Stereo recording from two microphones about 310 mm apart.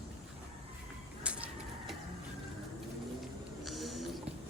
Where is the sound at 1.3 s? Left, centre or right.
Centre.